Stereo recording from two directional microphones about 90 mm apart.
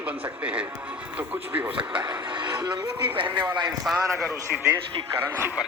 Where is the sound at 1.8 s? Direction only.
65° right (ahead or behind).